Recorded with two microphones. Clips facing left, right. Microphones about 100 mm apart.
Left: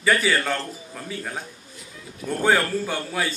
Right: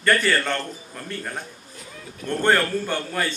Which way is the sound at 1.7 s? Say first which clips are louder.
Right 3 dB; 55° right (ahead or behind).